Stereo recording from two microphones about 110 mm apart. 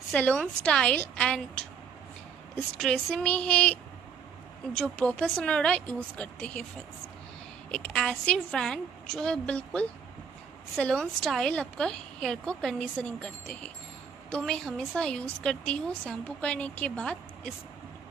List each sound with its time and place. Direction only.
0.1 s a woman's voice: 10° left (ahead or behind)
5.2 s a woman's voice: 10° left (ahead or behind)
7.7 s a woman's voice: 5° left (ahead or behind)